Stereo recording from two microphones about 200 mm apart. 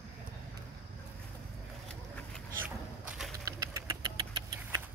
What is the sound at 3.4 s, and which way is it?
Engine, 15° right (ahead or behind).